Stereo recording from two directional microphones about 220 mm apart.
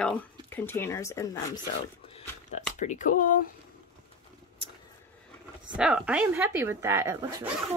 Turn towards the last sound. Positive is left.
turn(degrees=-10)  # may be behind; listen again after turning